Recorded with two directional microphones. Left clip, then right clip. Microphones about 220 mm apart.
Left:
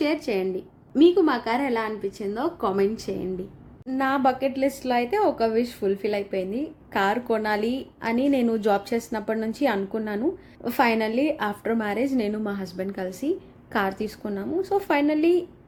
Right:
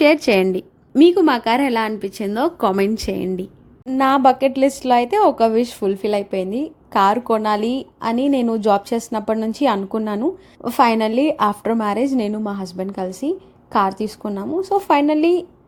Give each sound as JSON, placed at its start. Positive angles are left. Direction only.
{"t": 0.0, "sound": "a woman's voice", "side_deg": -35}